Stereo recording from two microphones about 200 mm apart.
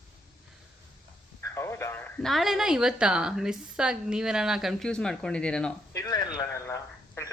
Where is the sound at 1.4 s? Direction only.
15° left (ahead or behind).